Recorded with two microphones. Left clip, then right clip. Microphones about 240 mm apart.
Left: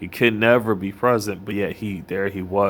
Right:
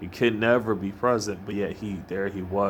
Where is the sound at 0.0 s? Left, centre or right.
Left.